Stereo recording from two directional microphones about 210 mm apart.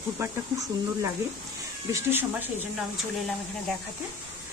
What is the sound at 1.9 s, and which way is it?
Speech, 10° right (ahead or behind).